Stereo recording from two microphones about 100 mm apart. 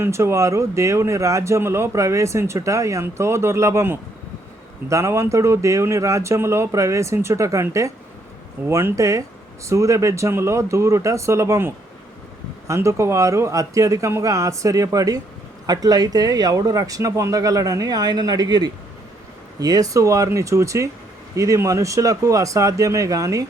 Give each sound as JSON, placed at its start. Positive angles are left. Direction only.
{"t": 0.0, "sound": "speech", "side_deg": -25}